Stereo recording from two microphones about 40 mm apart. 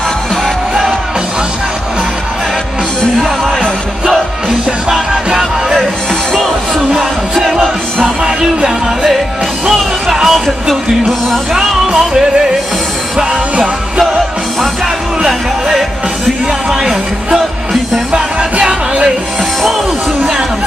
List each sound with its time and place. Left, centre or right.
5.4 s music: centre
7.0 s music: centre
8.2 s music: centre
10.2 s music: centre
11.5 s music: centre
18.1 s music: right